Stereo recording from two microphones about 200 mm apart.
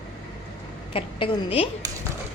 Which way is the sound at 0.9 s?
25° left (ahead or behind).